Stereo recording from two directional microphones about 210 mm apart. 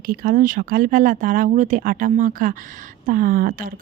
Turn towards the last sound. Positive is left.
turn(degrees=-40)  # may be behind; listen again after turning